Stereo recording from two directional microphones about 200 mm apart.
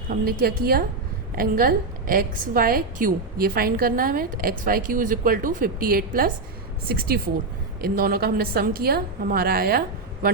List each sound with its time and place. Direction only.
0.1 s a woman's voice: 50° right (ahead or behind)